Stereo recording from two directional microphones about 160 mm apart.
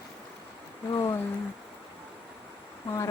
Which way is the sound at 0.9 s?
20° left (ahead or behind).